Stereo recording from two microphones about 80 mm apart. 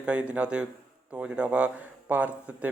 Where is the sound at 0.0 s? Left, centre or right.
Centre.